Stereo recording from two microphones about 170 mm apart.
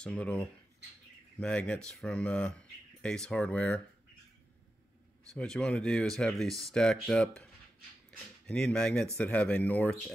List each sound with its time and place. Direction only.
0.0 s speech: 5° left (ahead or behind)
5.3 s speech: 5° left (ahead or behind)
8.5 s speech: 5° left (ahead or behind)